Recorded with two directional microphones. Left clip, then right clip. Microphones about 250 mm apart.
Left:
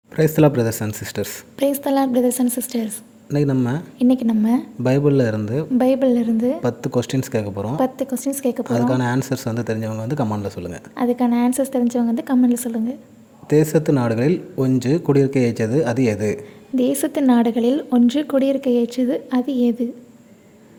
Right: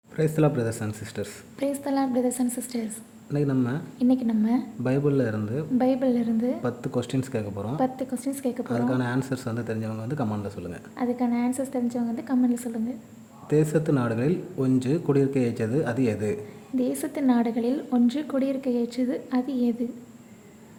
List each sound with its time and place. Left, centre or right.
0.2 s speech: left